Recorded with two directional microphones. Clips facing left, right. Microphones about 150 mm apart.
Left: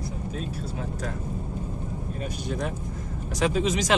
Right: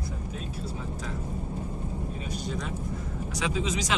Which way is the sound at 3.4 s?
55° left (ahead or behind).